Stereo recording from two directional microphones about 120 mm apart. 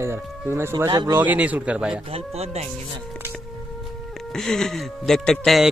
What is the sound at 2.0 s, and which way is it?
Speech, 55° right (ahead or behind).